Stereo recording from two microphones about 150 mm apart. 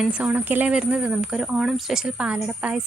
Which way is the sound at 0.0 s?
10° right (ahead or behind).